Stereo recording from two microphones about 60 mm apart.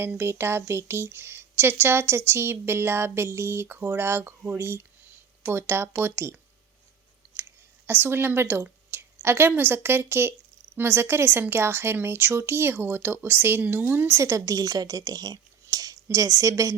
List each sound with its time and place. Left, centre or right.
0.2 s speech: right
7.9 s a woman's voice: right
14.2 s a woman's voice: right
16.0 s speech: right